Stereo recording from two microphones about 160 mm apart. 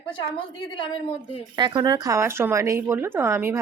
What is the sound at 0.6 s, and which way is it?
Speech, 30° left (ahead or behind).